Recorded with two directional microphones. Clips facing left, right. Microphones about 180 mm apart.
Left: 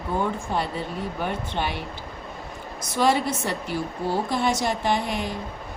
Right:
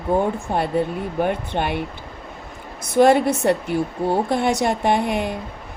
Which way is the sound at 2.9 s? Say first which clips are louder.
Right 7 dB; 55° right (ahead or behind).